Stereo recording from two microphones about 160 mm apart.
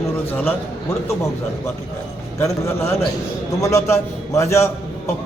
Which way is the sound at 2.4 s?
15° left (ahead or behind).